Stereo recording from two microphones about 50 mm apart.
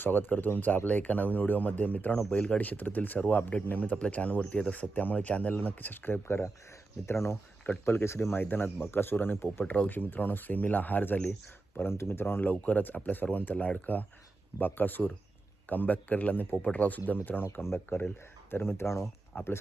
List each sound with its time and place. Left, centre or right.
0.0 s speech: left
6.2 s speech: left
7.6 s speech: left
8.0 s speech: left
9.6 s speech: left
11.8 s speech: left
17.4 s speech: left
19.3 s speech: left